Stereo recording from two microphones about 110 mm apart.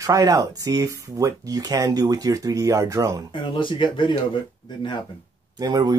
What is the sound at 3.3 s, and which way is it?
Speech, 50° left (ahead or behind).